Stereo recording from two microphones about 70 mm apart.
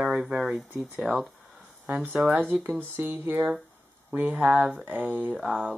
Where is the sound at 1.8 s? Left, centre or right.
Right.